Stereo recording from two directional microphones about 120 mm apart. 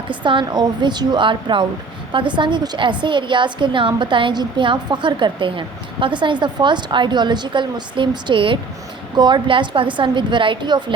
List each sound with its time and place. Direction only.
0.1 s a woman's voice: 45° right (ahead or behind)